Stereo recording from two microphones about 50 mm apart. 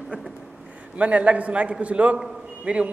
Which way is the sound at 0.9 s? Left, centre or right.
Right.